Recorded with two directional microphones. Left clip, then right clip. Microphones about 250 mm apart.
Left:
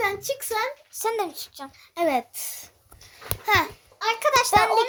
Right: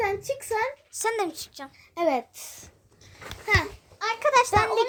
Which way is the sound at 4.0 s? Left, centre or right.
Centre.